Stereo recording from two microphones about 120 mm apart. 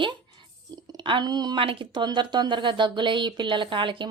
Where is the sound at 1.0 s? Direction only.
40° right (ahead or behind).